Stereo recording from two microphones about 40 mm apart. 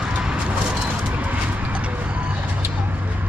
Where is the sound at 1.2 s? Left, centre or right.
Right.